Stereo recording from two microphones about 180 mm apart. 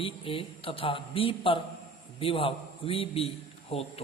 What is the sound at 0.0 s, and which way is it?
A man's voice, 30° left (ahead or behind).